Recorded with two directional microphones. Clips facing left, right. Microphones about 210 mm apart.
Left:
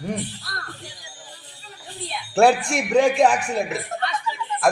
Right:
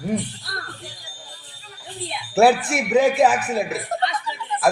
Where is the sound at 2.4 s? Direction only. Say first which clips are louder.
Right 1 dB; 5° right (ahead or behind).